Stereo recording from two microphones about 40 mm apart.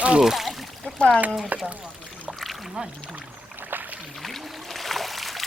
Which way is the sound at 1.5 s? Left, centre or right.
Right.